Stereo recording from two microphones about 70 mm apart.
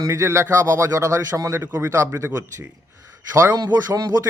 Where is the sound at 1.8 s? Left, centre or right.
Right.